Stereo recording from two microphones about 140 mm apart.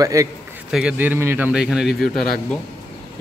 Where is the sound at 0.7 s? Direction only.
5° right (ahead or behind).